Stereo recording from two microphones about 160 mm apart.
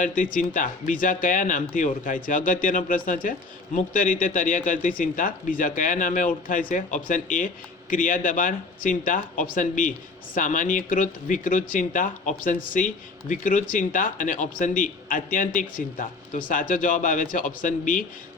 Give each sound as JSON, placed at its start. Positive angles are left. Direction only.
{"t": 0.0, "sound": "speech", "side_deg": 55}